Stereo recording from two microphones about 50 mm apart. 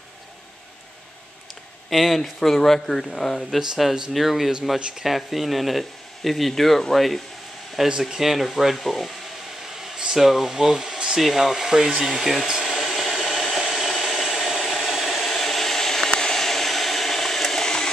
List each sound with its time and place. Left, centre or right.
1.9 s speech: centre
3.6 s speech: centre
4.7 s speech: centre
5.0 s speech: centre
12.4 s hair dryer: centre